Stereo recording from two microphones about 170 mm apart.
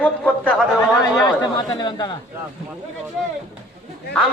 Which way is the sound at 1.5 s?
25° left (ahead or behind).